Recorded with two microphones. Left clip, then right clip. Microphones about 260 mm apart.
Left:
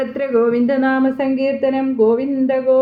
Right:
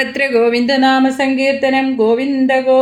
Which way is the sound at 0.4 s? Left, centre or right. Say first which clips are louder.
Right 4 dB; right.